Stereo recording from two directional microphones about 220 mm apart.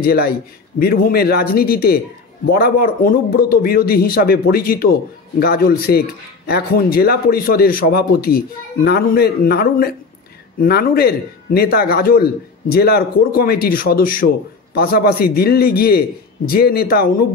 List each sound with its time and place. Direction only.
0.0 s speech: 45° left (ahead or behind)